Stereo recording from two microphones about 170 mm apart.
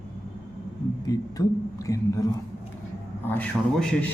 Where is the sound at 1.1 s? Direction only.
20° left (ahead or behind).